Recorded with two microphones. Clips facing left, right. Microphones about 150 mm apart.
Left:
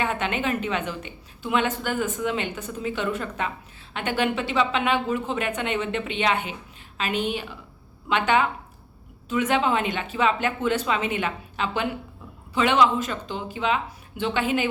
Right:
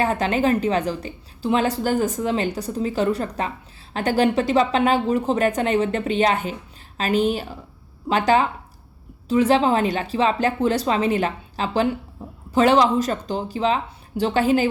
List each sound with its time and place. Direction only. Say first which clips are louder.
0.0 s speech: right 6 dB; 35° right (ahead or behind)